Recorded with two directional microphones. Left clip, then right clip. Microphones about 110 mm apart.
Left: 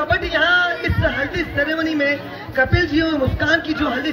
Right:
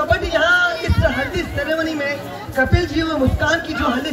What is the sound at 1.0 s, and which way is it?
A man's voice, 15° left (ahead or behind).